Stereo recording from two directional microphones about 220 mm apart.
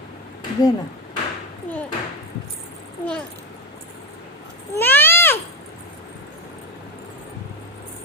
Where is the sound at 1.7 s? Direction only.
10° left (ahead or behind).